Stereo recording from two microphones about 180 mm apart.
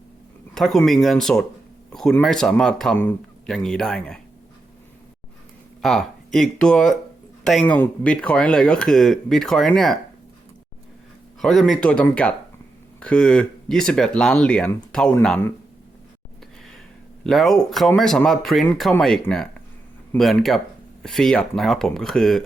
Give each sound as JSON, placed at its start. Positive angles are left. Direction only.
{"t": 0.5, "sound": "speech", "side_deg": 0}
{"t": 5.8, "sound": "speech", "side_deg": 0}
{"t": 11.3, "sound": "speech", "side_deg": 0}
{"t": 17.2, "sound": "speech", "side_deg": 0}